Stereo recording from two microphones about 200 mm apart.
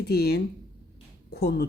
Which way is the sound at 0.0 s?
50° left (ahead or behind).